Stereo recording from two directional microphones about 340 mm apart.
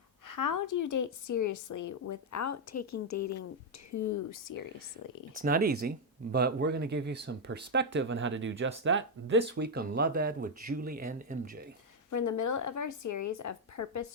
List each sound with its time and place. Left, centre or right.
0.3 s a woman's voice: left
5.3 s speech: right
12.1 s a woman's voice: left